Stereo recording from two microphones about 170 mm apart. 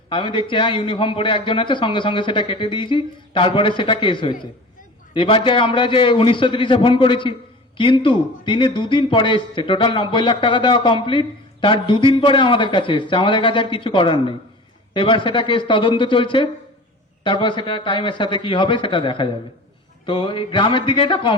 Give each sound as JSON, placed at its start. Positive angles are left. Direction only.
{"t": 0.1, "sound": "a man's voice", "side_deg": 30}